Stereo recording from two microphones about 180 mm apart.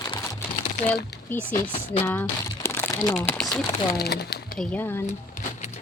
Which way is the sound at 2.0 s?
10° left (ahead or behind).